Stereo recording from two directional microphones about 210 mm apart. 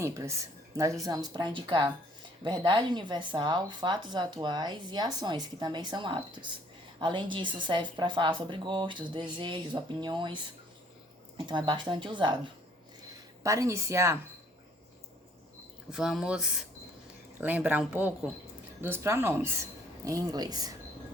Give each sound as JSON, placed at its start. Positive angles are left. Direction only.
{"t": 0.0, "sound": "speech", "side_deg": -15}
{"t": 13.4, "sound": "speech", "side_deg": -15}
{"t": 15.9, "sound": "speech", "side_deg": 0}